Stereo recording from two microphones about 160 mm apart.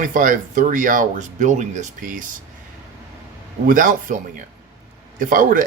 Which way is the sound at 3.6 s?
55° right (ahead or behind).